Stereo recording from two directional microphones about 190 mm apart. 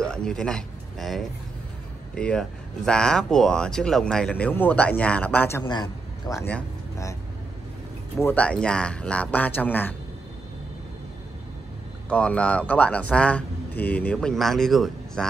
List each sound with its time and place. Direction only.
0.0 s speech: 5° left (ahead or behind)
5.6 s speech: 20° left (ahead or behind)
8.2 s speech: 10° left (ahead or behind)
12.1 s speech: 5° left (ahead or behind)